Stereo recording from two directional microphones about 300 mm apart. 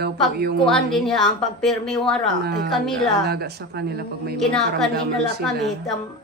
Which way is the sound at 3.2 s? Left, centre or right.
Right.